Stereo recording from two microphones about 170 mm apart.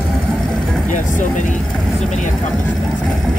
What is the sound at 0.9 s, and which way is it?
Speech, 45° left (ahead or behind).